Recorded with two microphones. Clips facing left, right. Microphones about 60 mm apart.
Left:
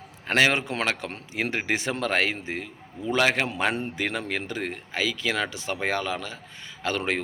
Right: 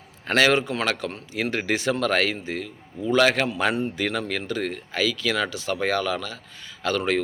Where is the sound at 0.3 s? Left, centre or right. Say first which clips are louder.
Right 2 dB; centre.